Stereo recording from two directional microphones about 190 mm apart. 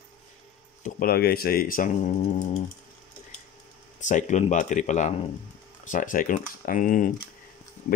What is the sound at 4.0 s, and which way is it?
Speech, 40° left (ahead or behind).